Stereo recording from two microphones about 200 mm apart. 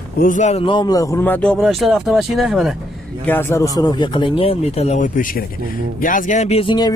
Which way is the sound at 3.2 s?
10° left (ahead or behind).